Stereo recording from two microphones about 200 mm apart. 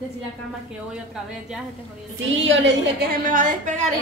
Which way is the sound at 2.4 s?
70° right (ahead or behind).